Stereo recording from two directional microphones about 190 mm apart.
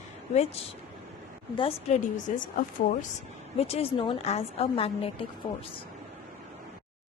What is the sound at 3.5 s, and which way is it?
A woman's voice, 30° left (ahead or behind).